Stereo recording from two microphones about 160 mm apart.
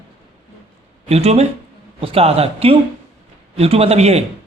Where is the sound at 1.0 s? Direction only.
40° right (ahead or behind).